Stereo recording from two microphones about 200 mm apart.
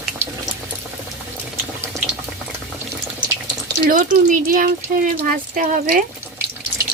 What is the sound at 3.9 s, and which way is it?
Speech, 45° right (ahead or behind).